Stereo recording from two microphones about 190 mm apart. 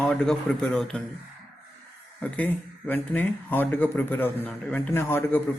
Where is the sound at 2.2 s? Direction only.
10° left (ahead or behind).